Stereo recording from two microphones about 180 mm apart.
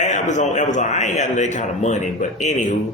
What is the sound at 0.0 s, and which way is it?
A man's voice, 40° left (ahead or behind).